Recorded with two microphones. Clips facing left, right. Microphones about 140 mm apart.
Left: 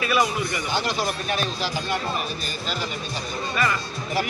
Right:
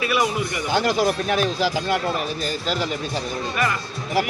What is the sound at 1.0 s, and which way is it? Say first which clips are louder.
Speech: right 6 dB; 90° right.